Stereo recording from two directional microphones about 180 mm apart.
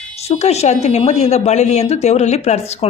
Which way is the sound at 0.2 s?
35° left (ahead or behind).